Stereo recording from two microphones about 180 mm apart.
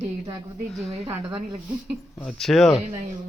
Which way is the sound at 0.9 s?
35° right (ahead or behind).